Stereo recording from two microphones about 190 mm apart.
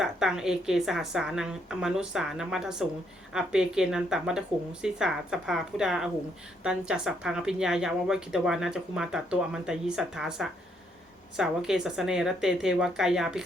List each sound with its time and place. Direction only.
0.0 s speech: 5° right (ahead or behind)